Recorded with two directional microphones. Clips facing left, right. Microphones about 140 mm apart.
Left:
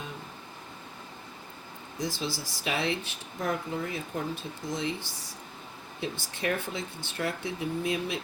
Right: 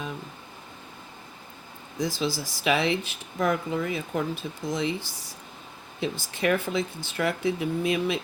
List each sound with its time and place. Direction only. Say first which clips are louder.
2.0 s speech: right 5 dB; 90° right